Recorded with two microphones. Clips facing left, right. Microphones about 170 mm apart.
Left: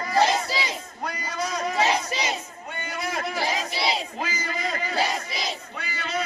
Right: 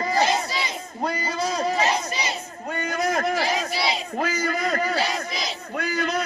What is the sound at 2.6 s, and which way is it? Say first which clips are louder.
Battle cry: right 7 dB; 45° right (ahead or behind).